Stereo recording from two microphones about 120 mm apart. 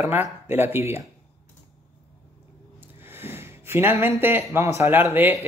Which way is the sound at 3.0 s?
20° right (ahead or behind).